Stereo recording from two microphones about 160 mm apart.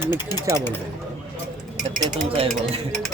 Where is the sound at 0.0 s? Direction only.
25° left (ahead or behind).